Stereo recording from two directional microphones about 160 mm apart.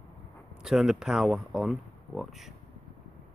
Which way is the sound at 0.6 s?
Centre (ahead or behind).